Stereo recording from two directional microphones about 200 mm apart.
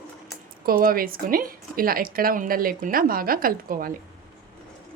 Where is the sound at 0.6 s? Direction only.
45° right (ahead or behind).